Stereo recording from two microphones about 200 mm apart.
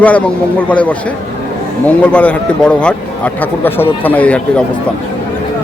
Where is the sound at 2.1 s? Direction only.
5° left (ahead or behind).